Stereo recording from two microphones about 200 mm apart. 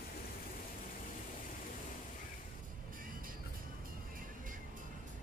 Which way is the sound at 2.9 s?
45° right (ahead or behind).